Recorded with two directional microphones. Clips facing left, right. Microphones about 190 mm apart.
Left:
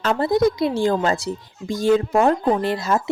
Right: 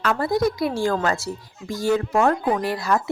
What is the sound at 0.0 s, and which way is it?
Speech, 25° left (ahead or behind).